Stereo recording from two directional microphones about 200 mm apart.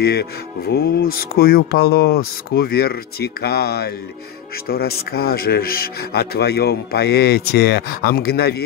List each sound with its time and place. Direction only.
0.0 s speech: 55° left (ahead or behind)